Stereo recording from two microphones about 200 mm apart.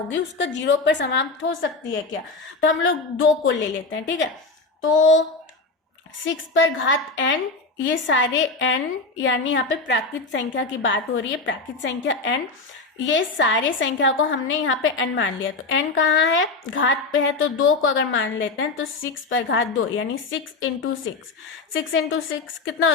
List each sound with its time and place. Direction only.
0.1 s a woman's voice: 65° left (ahead or behind)
6.2 s a woman's voice: 70° left (ahead or behind)